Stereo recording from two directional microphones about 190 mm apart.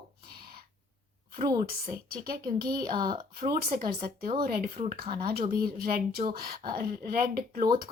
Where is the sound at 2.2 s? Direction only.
50° right (ahead or behind).